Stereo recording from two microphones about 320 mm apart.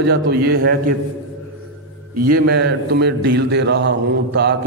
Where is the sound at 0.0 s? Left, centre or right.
Right.